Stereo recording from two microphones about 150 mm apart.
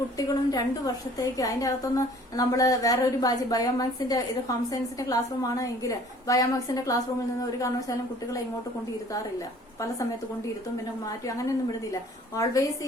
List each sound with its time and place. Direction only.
0.2 s a woman's voice: 25° left (ahead or behind)
11.0 s a woman's voice: 20° left (ahead or behind)